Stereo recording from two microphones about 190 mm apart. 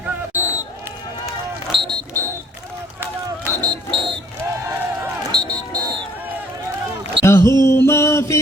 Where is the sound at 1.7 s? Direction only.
25° right (ahead or behind).